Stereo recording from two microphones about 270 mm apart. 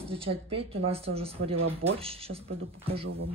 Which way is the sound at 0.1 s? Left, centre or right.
Right.